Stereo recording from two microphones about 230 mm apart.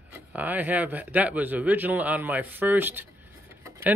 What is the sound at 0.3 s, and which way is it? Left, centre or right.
Speech, centre.